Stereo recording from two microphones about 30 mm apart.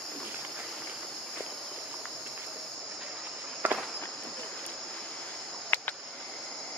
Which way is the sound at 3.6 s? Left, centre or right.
Right.